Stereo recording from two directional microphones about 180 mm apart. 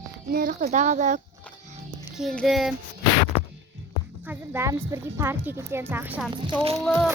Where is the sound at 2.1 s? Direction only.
Centre (ahead or behind).